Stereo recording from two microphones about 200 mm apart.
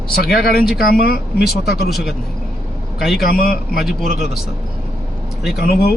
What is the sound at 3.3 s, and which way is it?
Speech, 45° left (ahead or behind).